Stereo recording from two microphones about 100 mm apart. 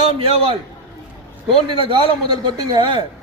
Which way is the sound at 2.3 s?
50° right (ahead or behind).